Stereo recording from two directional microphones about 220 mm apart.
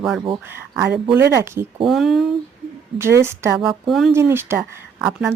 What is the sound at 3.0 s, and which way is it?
Speech, 10° right (ahead or behind).